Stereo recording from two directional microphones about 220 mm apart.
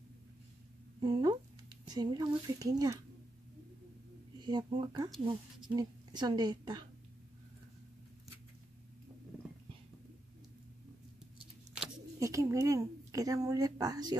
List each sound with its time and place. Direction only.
1.0 s speech: 20° right (ahead or behind)
4.4 s a woman's voice: 20° right (ahead or behind)
12.2 s a woman's voice: 15° right (ahead or behind)